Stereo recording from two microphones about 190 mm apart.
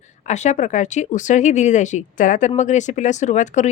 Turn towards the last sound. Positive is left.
turn(degrees=40)  # may be behind; listen again after turning